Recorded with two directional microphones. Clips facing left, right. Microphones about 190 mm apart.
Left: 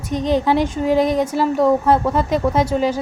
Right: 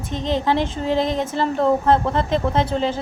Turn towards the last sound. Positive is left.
turn(degrees=10)  # may be behind; listen again after turning